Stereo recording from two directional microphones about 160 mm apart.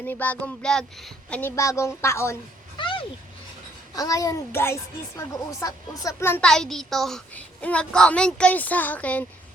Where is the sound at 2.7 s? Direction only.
30° left (ahead or behind).